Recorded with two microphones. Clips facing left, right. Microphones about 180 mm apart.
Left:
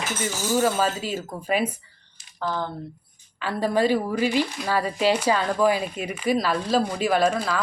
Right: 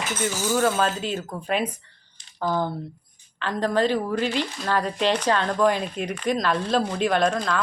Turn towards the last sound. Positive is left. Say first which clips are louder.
# left 1 dB
turn(degrees=5)  # may be behind; listen again after turning